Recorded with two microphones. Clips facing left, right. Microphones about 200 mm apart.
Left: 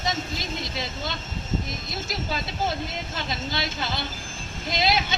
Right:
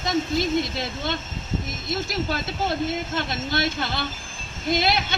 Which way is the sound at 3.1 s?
55° right (ahead or behind).